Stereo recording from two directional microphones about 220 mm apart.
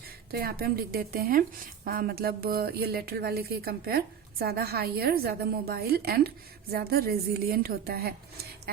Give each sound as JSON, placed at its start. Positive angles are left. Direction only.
{"t": 0.3, "sound": "a woman's voice", "side_deg": -45}